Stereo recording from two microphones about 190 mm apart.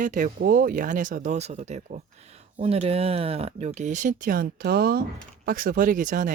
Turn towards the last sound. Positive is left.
turn(degrees=-45)  # may be behind; listen again after turning